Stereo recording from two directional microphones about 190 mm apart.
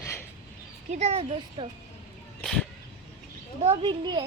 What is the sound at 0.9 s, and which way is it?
Speech, 35° right (ahead or behind).